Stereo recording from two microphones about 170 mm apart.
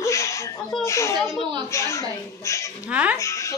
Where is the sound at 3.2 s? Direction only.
15° left (ahead or behind).